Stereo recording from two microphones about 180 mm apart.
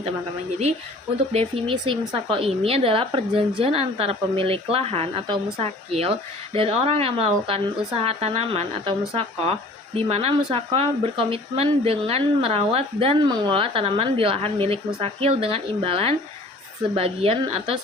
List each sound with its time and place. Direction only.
1.3 s speech: 30° right (ahead or behind)